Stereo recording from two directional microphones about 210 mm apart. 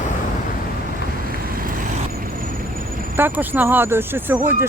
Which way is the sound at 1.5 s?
40° right (ahead or behind).